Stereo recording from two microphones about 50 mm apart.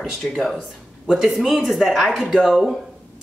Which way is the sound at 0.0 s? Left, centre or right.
Centre.